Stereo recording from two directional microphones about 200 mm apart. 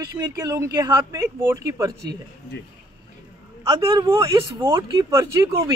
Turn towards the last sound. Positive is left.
turn(degrees=-15)  # may be behind; listen again after turning